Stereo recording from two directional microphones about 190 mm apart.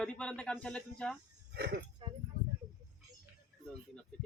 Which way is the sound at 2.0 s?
25° right (ahead or behind).